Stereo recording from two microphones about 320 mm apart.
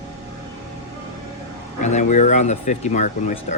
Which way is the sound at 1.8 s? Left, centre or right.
Left.